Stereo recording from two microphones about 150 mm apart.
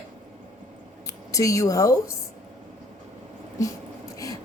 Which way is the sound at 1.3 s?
20° left (ahead or behind).